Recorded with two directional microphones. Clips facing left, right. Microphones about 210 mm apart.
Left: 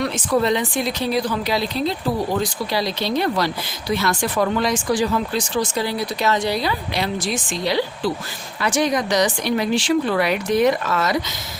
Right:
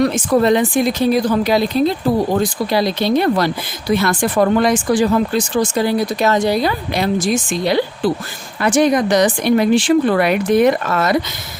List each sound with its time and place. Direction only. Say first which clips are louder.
0.0 s speech: right 6 dB; 45° right (ahead or behind)